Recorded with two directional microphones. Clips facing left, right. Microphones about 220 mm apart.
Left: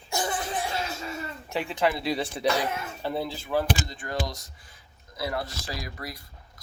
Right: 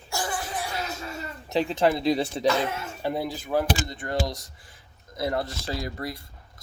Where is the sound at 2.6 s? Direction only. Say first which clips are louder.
Right 2 dB; 15° right (ahead or behind).